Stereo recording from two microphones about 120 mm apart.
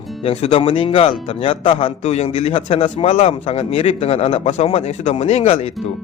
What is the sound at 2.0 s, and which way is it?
Speech, 65° left (ahead or behind).